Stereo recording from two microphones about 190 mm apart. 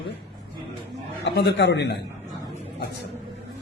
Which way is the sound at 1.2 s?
65° left (ahead or behind).